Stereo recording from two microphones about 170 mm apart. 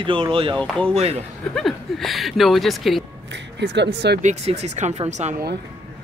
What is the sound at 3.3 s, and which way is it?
Speech, 90° right.